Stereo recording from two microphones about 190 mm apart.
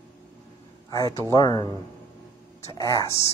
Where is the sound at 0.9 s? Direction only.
20° left (ahead or behind).